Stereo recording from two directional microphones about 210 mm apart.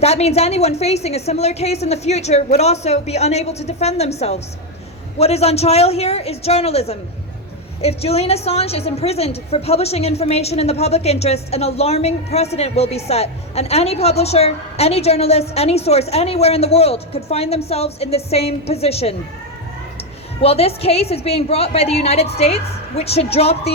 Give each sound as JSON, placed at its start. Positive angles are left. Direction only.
{"t": 0.0, "sound": "a woman's voice", "side_deg": 30}